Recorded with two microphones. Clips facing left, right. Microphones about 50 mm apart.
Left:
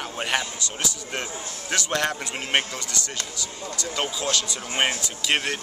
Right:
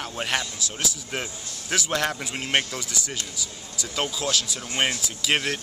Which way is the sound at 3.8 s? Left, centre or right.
Centre.